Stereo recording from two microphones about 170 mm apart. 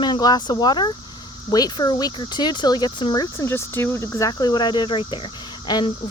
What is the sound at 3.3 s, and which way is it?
Speech, 15° left (ahead or behind).